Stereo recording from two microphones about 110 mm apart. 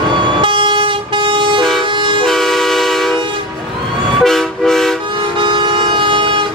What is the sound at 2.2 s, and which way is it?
Vehicle, centre (ahead or behind).